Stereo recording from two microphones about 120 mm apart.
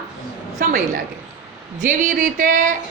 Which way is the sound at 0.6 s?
90° right.